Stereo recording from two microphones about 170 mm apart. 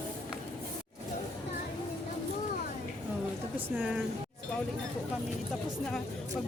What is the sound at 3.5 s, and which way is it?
Speech, 10° right (ahead or behind).